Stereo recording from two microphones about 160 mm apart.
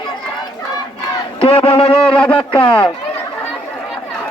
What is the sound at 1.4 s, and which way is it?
Speech, 35° left (ahead or behind).